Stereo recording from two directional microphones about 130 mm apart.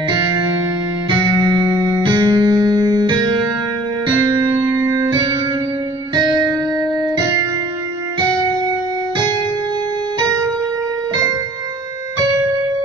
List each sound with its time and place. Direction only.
2.0 s music: 35° right (ahead or behind)
4.5 s music: 20° right (ahead or behind)